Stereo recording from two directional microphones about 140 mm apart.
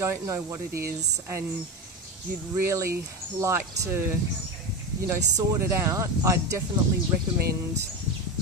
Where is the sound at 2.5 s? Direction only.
20° right (ahead or behind).